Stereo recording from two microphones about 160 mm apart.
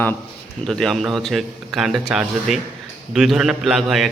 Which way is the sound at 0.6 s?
Centre (ahead or behind).